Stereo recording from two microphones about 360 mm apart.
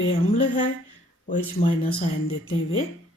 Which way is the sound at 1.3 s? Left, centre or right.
Left.